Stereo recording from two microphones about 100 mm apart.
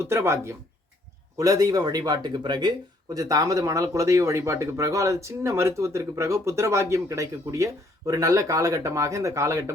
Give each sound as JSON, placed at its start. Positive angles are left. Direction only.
{"t": 0.0, "sound": "speech", "side_deg": -25}
{"t": 1.4, "sound": "speech", "side_deg": -35}